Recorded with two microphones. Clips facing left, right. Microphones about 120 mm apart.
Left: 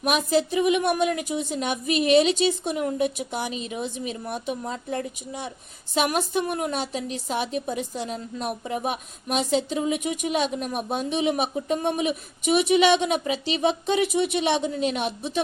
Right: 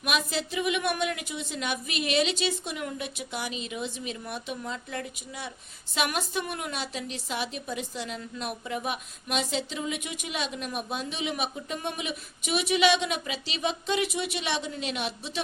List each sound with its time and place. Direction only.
0.0 s a woman's voice: 40° left (ahead or behind)